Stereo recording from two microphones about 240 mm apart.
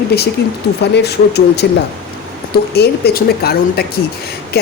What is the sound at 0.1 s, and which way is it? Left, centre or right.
Speech, left.